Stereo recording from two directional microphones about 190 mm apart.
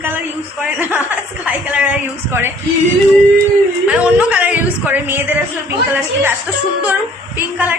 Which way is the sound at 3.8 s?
5° right (ahead or behind).